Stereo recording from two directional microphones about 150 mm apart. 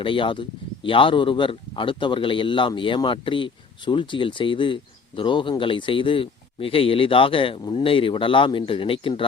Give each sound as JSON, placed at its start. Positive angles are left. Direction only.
{"t": 0.0, "sound": "a man's voice", "side_deg": 35}